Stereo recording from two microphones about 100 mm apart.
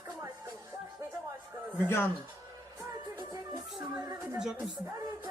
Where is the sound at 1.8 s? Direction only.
25° left (ahead or behind).